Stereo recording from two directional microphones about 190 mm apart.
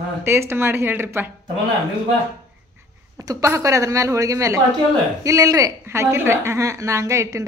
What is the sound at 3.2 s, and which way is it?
Speech, 15° right (ahead or behind).